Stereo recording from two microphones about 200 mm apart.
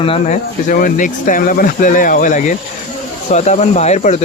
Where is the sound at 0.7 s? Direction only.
45° left (ahead or behind).